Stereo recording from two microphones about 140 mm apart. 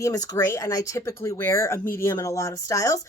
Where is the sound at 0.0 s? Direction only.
25° left (ahead or behind).